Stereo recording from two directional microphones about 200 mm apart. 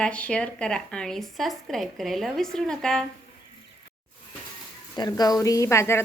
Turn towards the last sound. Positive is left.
turn(degrees=15)  # may be behind; listen again after turning